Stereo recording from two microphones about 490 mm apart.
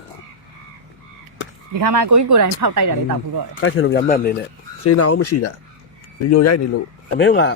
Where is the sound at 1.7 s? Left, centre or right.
Right.